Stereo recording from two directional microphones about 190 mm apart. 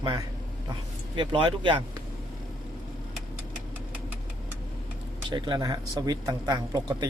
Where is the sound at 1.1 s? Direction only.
25° right (ahead or behind).